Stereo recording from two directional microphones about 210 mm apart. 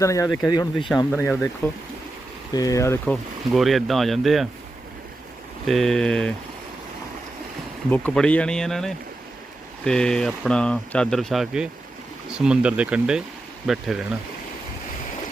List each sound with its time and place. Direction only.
0.0 s speech: 15° left (ahead or behind)
1.2 s speech: 5° left (ahead or behind)
2.5 s speech: 15° left (ahead or behind)
3.5 s speech: centre (ahead or behind)
5.6 s speech: centre (ahead or behind)
7.9 s speech: 5° left (ahead or behind)